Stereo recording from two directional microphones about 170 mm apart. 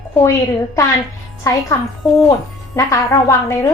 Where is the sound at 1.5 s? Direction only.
20° left (ahead or behind).